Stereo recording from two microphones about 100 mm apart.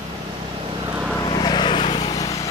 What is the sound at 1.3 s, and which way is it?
Vehicle, 45° left (ahead or behind).